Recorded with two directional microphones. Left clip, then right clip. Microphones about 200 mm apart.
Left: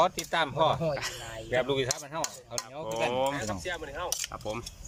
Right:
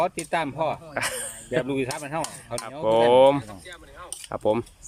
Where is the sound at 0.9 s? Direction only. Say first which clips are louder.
Right 6 dB; 60° right (ahead or behind).